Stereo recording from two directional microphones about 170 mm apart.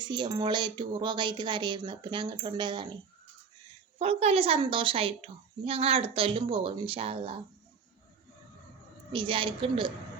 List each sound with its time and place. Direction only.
0.0 s speech: 25° right (ahead or behind)
3.9 s a woman's voice: 35° right (ahead or behind)
9.1 s speech: 30° right (ahead or behind)